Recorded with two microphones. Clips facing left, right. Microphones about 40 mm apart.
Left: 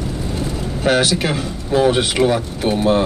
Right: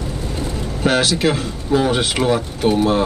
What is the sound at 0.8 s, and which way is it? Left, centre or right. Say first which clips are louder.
Speech: even; left.